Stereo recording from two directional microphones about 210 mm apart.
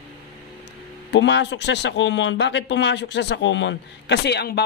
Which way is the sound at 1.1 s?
55° left (ahead or behind).